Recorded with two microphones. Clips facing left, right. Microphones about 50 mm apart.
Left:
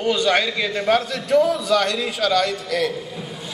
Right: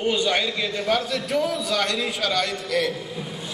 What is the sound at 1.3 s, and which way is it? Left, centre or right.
Speech, left.